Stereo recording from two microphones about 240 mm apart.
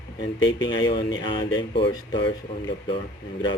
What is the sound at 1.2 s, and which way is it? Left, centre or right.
Speech, centre.